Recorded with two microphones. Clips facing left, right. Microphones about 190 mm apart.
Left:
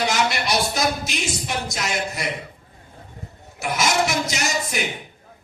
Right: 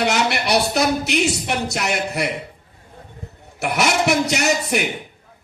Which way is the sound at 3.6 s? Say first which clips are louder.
Right 2 dB; 65° right (ahead or behind).